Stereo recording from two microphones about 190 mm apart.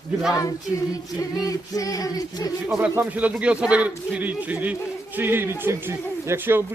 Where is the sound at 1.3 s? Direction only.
20° left (ahead or behind).